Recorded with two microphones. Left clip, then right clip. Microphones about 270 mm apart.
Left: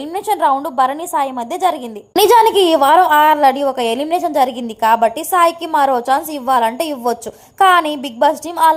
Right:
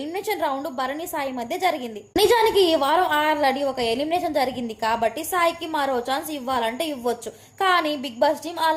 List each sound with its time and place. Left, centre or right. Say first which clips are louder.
0.1 s a woman's voice: left 11 dB; centre